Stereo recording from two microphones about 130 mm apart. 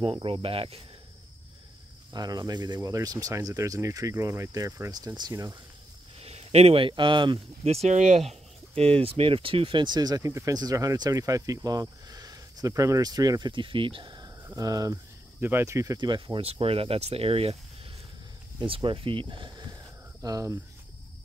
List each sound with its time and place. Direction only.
0.0 s speech: 40° right (ahead or behind)
2.1 s speech: 30° right (ahead or behind)
6.1 s speech: 55° right (ahead or behind)
7.6 s speech: 55° right (ahead or behind); by 16.4 s 35° right (ahead or behind)
16.4 s speech: 45° right (ahead or behind)
18.6 s speech: 40° right (ahead or behind)